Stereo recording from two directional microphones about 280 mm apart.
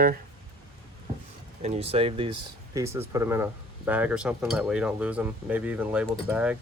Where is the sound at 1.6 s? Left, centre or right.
Right; by 6.5 s centre.